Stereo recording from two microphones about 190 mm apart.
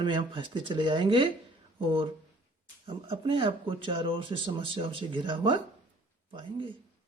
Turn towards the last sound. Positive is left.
turn(degrees=-25)  # may be behind; listen again after turning